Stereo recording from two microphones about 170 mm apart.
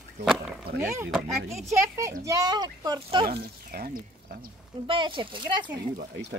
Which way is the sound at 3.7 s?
55° right (ahead or behind).